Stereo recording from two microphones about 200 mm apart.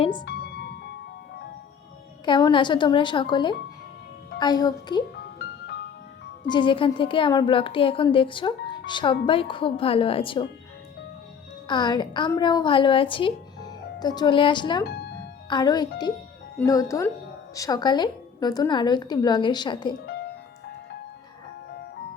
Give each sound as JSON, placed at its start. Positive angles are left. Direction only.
{"t": 0.0, "sound": "music", "side_deg": 25}
{"t": 0.3, "sound": "music", "side_deg": 55}
{"t": 2.2, "sound": "a woman's voice", "side_deg": 25}
{"t": 6.5, "sound": "a woman's voice", "side_deg": 25}
{"t": 11.7, "sound": "a woman's voice", "side_deg": 20}
{"t": 14.8, "sound": "speech", "side_deg": 55}
{"t": 15.4, "sound": "a child's voice", "side_deg": 20}